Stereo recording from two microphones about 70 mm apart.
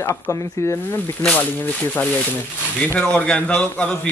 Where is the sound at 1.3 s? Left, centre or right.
Left.